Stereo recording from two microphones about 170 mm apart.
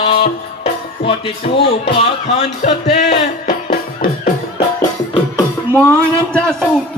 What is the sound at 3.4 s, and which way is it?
Music, 55° left (ahead or behind).